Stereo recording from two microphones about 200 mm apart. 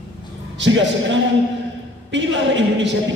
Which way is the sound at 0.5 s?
65° right (ahead or behind).